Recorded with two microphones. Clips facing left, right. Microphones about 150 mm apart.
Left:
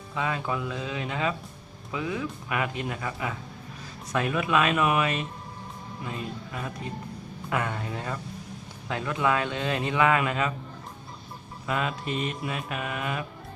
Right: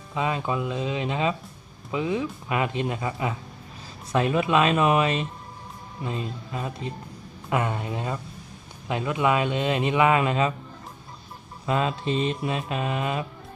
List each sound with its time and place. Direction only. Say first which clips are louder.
0.1 s a man's voice: right 3 dB; 20° right (ahead or behind)
11.6 s a man's voice: right 4 dB; 25° right (ahead or behind)